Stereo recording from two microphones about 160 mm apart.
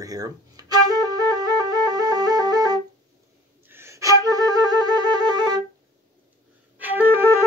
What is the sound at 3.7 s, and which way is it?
Flute, 15° right (ahead or behind).